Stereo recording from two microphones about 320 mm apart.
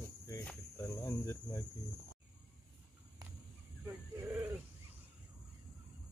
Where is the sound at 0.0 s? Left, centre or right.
Centre.